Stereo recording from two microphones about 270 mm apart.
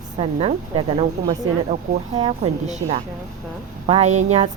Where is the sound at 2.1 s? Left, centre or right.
Centre.